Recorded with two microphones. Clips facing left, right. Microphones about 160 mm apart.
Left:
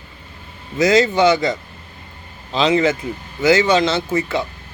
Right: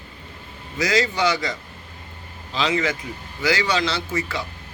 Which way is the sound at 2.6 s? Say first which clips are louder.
Left 7 dB; 25° left (ahead or behind).